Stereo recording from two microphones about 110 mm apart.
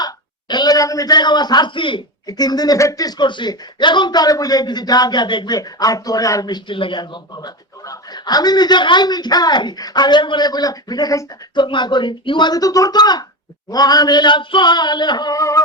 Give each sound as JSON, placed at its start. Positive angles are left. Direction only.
{"t": 0.0, "sound": "a man's voice", "side_deg": 40}
{"t": 2.2, "sound": "speech", "side_deg": 35}
{"t": 5.5, "sound": "speech", "side_deg": 35}